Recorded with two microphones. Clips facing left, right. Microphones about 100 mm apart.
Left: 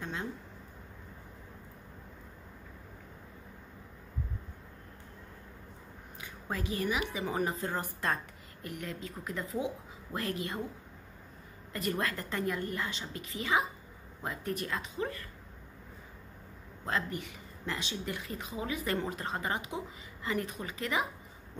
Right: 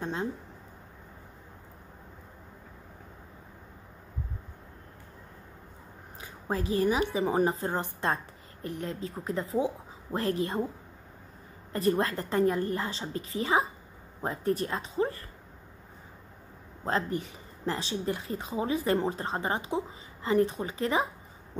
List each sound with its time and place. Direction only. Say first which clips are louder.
0.0 s speech: right 6 dB; 30° right (ahead or behind)
6.2 s speech: right 6 dB; 35° right (ahead or behind)
11.7 s speech: right 7 dB; 30° right (ahead or behind)
16.8 s speech: right 5 dB; 35° right (ahead or behind)